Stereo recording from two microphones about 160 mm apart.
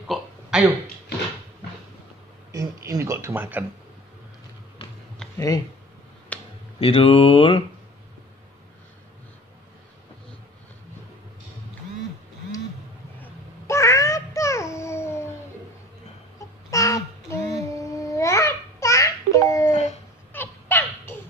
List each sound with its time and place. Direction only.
0.1 s burping: 5° right (ahead or behind)
2.5 s speech: 20° right (ahead or behind)
6.3 s a sound: 10° left (ahead or behind)
6.8 s speech: 35° left (ahead or behind)
13.2 s a sound: 15° left (ahead or behind)
16.7 s babbling: 20° left (ahead or behind)
19.7 s dog: 45° left (ahead or behind)
20.3 s goose: 15° left (ahead or behind)